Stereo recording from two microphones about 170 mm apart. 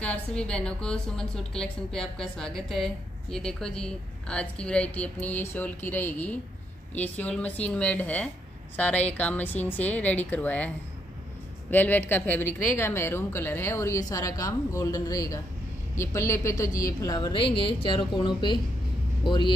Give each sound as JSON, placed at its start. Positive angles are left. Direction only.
{"t": 0.0, "sound": "a woman's voice", "side_deg": 5}
{"t": 11.7, "sound": "a woman's voice", "side_deg": 10}